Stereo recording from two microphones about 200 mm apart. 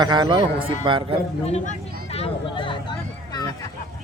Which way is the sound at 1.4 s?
30° left (ahead or behind).